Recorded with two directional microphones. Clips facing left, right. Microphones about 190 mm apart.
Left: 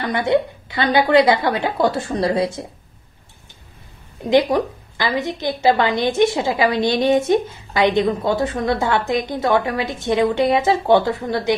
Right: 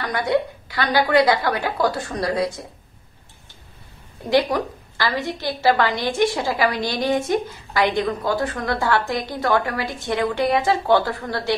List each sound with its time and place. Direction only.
0.0 s a woman's voice: 25° left (ahead or behind)
4.2 s a woman's voice: 20° left (ahead or behind)